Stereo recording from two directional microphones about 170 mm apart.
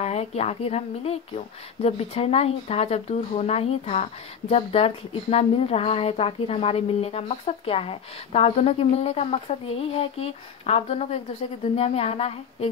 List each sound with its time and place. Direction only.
0.0 s a woman's voice: 40° left (ahead or behind)